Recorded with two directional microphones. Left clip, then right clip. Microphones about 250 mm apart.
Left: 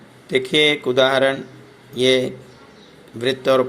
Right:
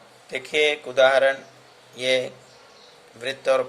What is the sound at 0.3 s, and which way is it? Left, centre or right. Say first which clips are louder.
Speech: left 5 dB; centre.